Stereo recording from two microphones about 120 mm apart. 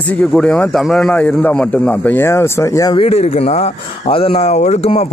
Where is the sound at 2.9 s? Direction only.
50° left (ahead or behind).